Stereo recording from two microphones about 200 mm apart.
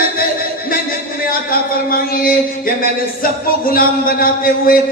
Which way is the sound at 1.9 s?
45° left (ahead or behind).